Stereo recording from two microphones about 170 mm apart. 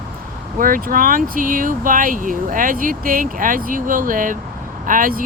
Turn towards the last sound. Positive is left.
turn(degrees=-55)  # may be behind; listen again after turning